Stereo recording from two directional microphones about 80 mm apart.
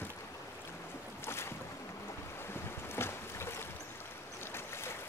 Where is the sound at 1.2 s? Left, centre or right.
Left.